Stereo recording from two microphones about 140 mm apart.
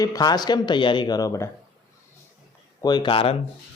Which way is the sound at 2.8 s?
35° left (ahead or behind).